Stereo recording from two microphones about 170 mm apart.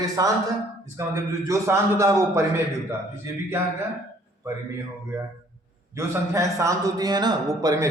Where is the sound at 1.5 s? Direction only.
15° right (ahead or behind).